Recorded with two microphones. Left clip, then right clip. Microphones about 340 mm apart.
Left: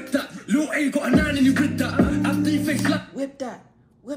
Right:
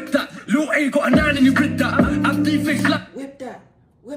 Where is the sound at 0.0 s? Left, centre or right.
Centre.